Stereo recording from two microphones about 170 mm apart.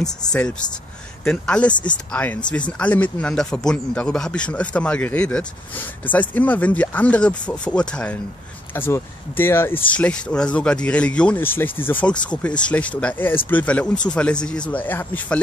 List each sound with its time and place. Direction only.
0.3 s speech: 5° left (ahead or behind)